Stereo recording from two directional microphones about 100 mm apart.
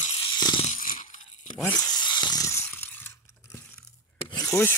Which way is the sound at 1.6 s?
15° left (ahead or behind).